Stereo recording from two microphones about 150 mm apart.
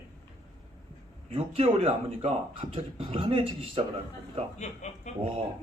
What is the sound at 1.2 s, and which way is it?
Speech, 40° right (ahead or behind).